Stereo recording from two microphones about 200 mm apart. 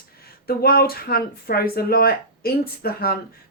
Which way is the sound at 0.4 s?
50° left (ahead or behind).